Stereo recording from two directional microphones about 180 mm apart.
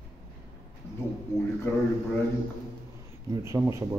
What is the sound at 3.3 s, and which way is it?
Speech, 15° right (ahead or behind).